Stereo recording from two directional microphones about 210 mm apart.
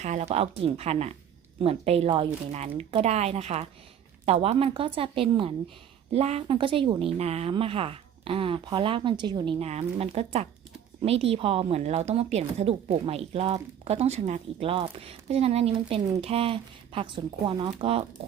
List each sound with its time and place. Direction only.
0.0 s a woman's voice: 35° right (ahead or behind)